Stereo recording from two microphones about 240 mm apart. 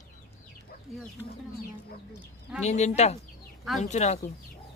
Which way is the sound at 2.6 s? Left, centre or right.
Left.